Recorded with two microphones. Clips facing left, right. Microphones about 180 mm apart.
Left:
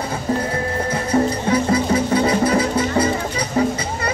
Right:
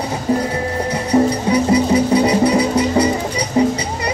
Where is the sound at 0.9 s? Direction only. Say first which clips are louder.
Right 4 dB; 15° right (ahead or behind).